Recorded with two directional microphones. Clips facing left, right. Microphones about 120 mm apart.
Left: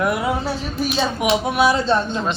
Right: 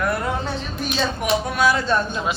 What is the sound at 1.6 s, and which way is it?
Speech, 25° left (ahead or behind).